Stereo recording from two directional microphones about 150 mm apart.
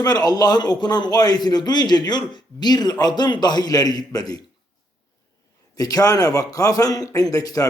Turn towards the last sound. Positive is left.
turn(degrees=25)  # may be behind; listen again after turning